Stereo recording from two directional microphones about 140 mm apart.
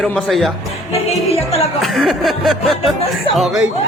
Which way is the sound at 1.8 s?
Centre (ahead or behind).